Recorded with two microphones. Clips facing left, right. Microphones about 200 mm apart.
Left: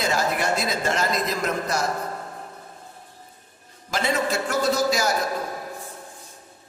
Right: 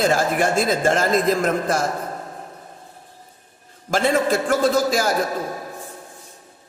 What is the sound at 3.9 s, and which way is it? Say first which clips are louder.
A man's voice: right 6 dB; 50° right (ahead or behind).